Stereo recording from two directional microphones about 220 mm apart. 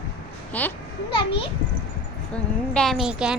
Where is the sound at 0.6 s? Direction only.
5° left (ahead or behind).